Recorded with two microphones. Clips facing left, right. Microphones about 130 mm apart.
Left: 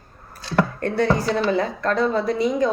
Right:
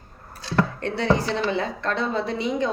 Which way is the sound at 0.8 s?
45° left (ahead or behind).